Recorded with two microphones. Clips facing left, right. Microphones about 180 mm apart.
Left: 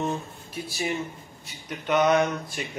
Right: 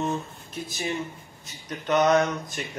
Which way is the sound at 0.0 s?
10° left (ahead or behind).